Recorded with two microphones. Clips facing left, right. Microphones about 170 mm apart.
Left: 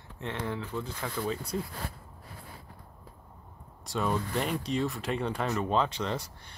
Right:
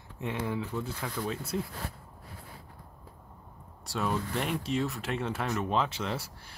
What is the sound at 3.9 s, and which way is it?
Speech, centre (ahead or behind).